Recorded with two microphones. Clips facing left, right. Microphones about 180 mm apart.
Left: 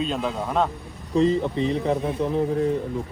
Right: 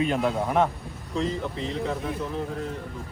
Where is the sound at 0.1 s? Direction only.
15° right (ahead or behind).